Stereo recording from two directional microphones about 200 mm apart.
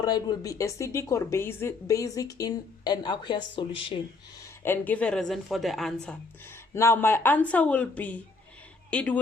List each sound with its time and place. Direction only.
0.0 s speech: 20° left (ahead or behind)
4.6 s a woman's voice: 10° left (ahead or behind)
6.5 s speech: 10° left (ahead or behind)